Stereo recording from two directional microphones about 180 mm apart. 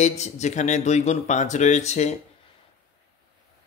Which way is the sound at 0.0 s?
40° left (ahead or behind).